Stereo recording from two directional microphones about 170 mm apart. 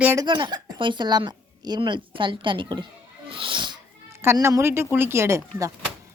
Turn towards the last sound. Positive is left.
turn(degrees=-20)  # may be behind; listen again after turning